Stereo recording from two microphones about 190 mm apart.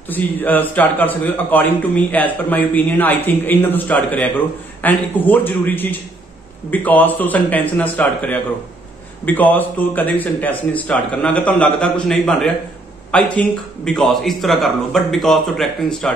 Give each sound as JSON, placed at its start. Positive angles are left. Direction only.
{"t": 0.1, "sound": "a man's voice", "side_deg": 10}